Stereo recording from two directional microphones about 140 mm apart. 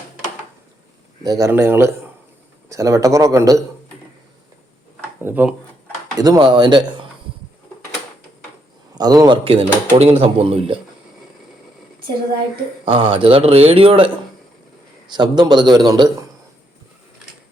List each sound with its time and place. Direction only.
1.2 s a man's voice: 25° right (ahead or behind)
5.2 s speech: 10° right (ahead or behind)
6.1 s speech: 25° right (ahead or behind)
9.0 s speech: 30° right (ahead or behind)
12.8 s speech: 40° right (ahead or behind)
15.1 s speech: 30° right (ahead or behind)